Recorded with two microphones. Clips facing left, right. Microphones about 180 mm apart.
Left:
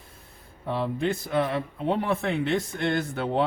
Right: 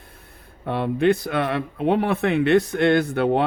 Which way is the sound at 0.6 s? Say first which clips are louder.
Right 7 dB; 65° right (ahead or behind).